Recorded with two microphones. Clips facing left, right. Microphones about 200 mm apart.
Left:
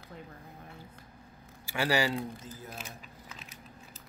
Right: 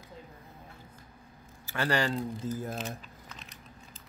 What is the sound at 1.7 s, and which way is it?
Speech, 10° left (ahead or behind).